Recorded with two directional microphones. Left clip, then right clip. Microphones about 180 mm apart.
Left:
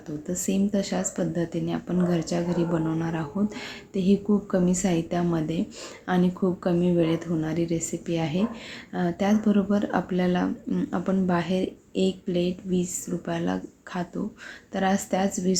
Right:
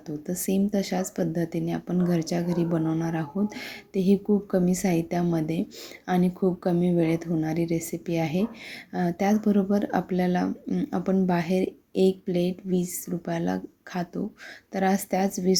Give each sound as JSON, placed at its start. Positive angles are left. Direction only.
{"t": 0.3, "sound": "speech", "side_deg": -30}